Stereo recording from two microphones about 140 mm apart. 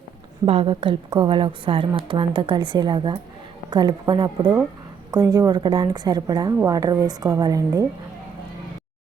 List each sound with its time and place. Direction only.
0.4 s a woman's voice: 40° right (ahead or behind); by 7.9 s 25° right (ahead or behind)